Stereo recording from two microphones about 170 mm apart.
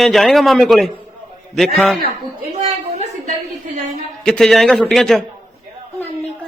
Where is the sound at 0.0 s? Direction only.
Centre (ahead or behind).